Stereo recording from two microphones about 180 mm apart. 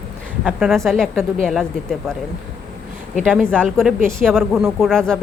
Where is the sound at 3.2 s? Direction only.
5° left (ahead or behind).